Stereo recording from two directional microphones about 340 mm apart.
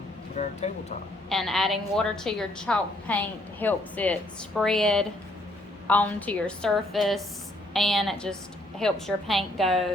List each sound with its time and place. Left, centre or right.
0.4 s speech: left
1.3 s a woman's voice: centre